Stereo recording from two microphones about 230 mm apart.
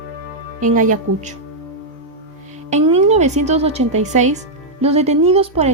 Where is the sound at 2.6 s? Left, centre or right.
Right.